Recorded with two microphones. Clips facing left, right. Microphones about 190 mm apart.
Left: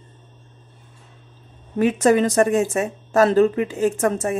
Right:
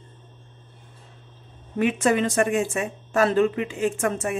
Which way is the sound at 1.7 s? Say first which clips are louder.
Left 5 dB; 40° left (ahead or behind).